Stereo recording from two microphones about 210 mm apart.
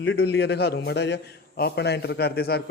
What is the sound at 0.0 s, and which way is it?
A man's voice, 55° left (ahead or behind).